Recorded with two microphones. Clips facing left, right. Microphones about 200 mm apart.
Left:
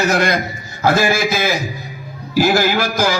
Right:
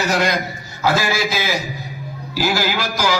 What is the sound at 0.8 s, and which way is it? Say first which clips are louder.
A man's voice: left 4 dB; 50° left (ahead or behind).